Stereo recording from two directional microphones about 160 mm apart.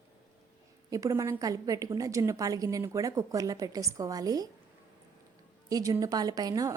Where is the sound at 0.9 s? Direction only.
20° right (ahead or behind).